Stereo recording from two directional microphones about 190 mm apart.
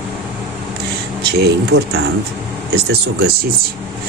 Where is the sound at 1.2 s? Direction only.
55° right (ahead or behind).